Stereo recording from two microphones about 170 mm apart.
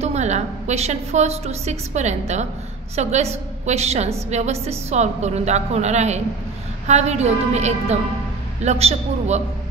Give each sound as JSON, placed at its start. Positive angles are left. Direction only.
{"t": 0.0, "sound": "a woman's voice", "side_deg": -40}